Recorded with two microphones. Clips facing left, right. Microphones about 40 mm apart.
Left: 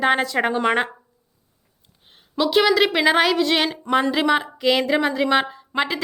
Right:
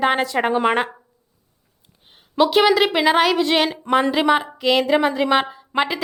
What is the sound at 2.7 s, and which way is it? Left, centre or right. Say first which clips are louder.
A woman's voice: right 1 dB; centre.